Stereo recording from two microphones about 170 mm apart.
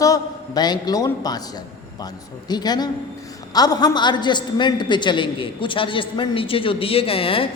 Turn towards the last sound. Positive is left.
turn(degrees=30)  # may be behind; listen again after turning